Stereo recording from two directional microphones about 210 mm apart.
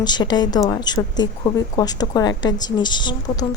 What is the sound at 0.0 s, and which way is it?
A woman's voice, 20° left (ahead or behind).